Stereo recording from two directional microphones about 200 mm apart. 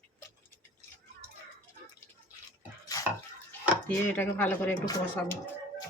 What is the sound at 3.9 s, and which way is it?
Speech, 10° left (ahead or behind).